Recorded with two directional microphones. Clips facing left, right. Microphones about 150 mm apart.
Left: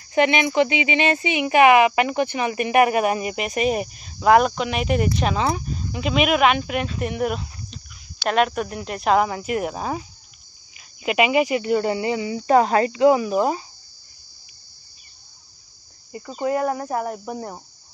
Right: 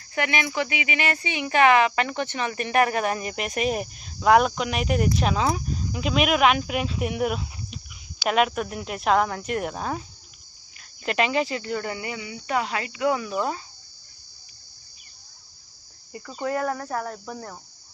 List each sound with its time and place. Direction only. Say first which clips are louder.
0.1 s speech: left 8 dB; 20° left (ahead or behind); by 10.0 s 5° left (ahead or behind)
11.1 s speech: left 5 dB; 10° left (ahead or behind); by 13.0 s 40° left (ahead or behind)
13.0 s speech: left 6 dB; 20° left (ahead or behind)
16.2 s cricket: left 4 dB; 15° left (ahead or behind)